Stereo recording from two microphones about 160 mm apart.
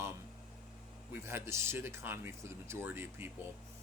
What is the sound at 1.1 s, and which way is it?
Speech, 15° right (ahead or behind).